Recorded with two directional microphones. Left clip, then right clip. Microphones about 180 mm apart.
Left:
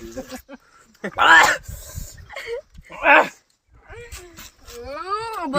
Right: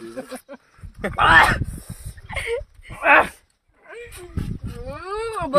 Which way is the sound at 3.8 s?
40° right (ahead or behind).